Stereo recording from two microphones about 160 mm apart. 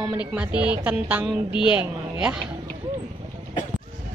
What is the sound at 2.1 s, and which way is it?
Speech, 5° right (ahead or behind).